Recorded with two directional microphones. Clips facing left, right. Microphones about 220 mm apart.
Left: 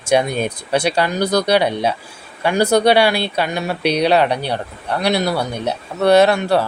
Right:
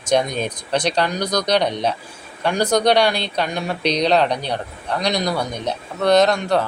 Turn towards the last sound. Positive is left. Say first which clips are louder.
# left 3 dB
turn(degrees=5)  # may be behind; listen again after turning